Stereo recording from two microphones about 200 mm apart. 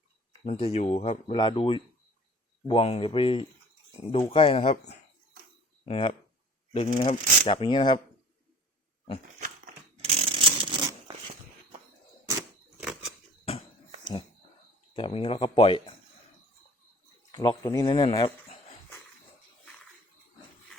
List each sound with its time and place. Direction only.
0.4 s speech: 30° left (ahead or behind)
9.4 s dog: 40° right (ahead or behind)
10.2 s zipper: 25° right (ahead or behind)
12.7 s scissors: centre (ahead or behind)
13.4 s a sound: 30° left (ahead or behind)
14.9 s speech: 25° left (ahead or behind)
17.3 s speech: 20° left (ahead or behind)